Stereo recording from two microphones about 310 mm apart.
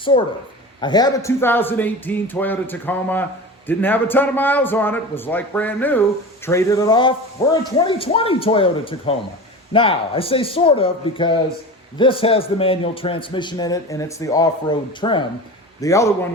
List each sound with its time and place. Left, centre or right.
0.0 s a man's voice: centre